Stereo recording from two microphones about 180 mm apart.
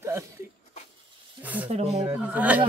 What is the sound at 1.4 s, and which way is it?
Snake, 10° right (ahead or behind).